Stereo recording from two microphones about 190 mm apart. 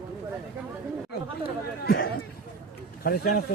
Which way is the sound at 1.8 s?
55° left (ahead or behind).